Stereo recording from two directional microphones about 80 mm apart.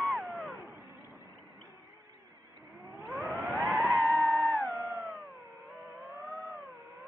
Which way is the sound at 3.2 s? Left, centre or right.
Right.